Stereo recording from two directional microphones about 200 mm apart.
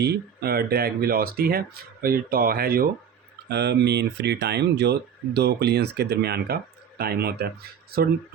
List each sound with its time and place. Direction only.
0.0 s speech: 55° right (ahead or behind)